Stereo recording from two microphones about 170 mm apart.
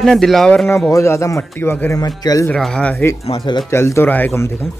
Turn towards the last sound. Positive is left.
turn(degrees=15)  # may be behind; listen again after turning